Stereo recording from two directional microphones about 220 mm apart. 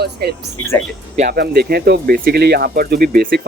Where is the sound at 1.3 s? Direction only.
45° right (ahead or behind).